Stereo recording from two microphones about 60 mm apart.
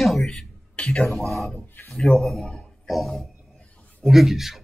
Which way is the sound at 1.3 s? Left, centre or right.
Centre.